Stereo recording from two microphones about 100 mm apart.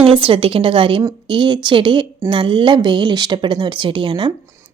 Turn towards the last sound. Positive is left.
turn(degrees=-55)  # may be behind; listen again after turning